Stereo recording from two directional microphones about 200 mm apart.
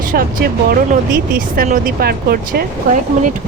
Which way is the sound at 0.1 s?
45° right (ahead or behind).